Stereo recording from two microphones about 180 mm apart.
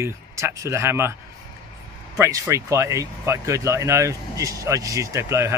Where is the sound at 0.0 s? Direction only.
15° right (ahead or behind).